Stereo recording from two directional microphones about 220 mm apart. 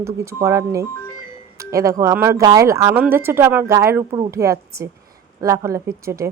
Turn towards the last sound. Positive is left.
turn(degrees=-15)  # may be behind; listen again after turning